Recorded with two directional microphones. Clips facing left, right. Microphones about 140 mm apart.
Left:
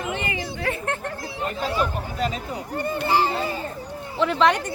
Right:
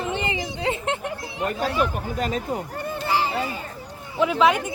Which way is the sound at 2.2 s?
50° right (ahead or behind).